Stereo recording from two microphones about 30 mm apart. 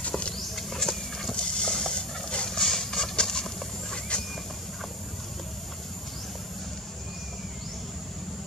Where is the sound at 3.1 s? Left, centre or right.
Left.